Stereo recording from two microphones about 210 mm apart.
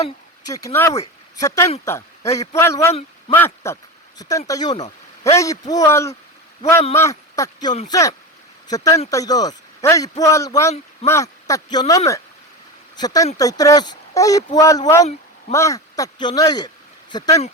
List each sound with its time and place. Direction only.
0.4 s a man's voice: 15° left (ahead or behind)